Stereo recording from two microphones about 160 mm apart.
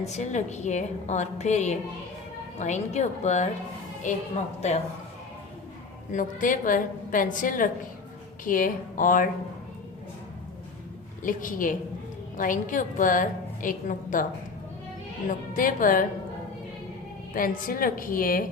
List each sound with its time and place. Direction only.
0.0 s a woman's voice: 45° left (ahead or behind)
6.1 s a woman's voice: 55° left (ahead or behind)
11.2 s a woman's voice: 55° left (ahead or behind)
15.3 s a woman's voice: 55° left (ahead or behind)
17.3 s a woman's voice: 60° left (ahead or behind)